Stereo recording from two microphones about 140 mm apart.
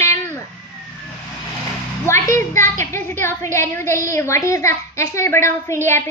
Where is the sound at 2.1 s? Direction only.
20° left (ahead or behind).